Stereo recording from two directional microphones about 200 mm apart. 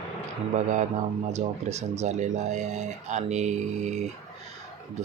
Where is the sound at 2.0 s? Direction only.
35° right (ahead or behind).